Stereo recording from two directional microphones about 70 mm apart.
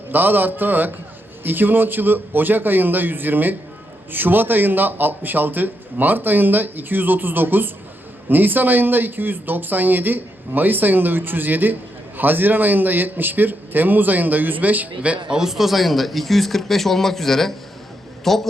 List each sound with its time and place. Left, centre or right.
0.1 s speech: right
15.3 s speech: centre